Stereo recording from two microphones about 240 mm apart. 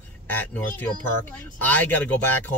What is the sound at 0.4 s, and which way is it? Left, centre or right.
Speech, centre.